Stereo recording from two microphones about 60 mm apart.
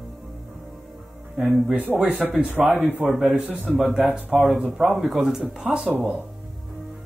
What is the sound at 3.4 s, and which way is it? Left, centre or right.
Speech, right.